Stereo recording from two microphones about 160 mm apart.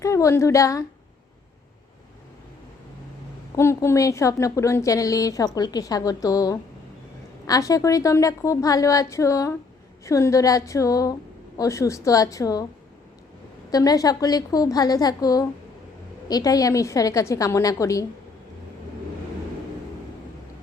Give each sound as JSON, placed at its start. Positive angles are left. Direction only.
{"t": 0.0, "sound": "a woman's voice", "side_deg": 20}
{"t": 3.5, "sound": "a woman's voice", "side_deg": 20}
{"t": 13.7, "sound": "a woman's voice", "side_deg": 25}